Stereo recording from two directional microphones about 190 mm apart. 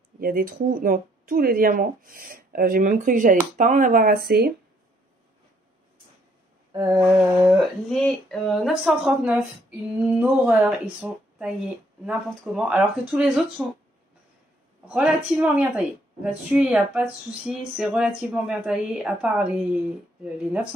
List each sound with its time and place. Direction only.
0.2 s speech: 50° right (ahead or behind)
6.7 s a sound: 20° right (ahead or behind)
7.1 s a woman's voice: 5° right (ahead or behind)
15.3 s a woman's voice: 10° right (ahead or behind)